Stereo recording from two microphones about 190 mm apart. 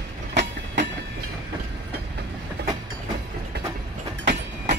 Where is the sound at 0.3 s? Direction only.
65° right (ahead or behind).